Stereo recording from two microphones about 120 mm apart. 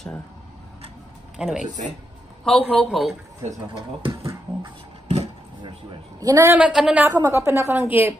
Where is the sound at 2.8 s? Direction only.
Centre (ahead or behind).